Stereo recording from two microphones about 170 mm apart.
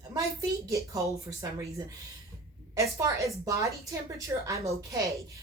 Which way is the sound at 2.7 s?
20° right (ahead or behind).